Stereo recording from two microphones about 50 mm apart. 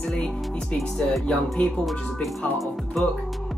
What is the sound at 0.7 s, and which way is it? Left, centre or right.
Speech, centre.